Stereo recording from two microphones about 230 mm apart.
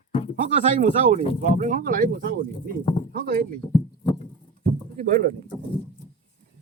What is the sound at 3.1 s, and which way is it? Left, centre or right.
Speech, right.